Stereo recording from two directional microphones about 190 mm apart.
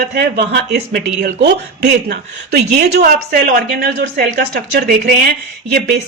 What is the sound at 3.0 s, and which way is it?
Speech, 50° right (ahead or behind).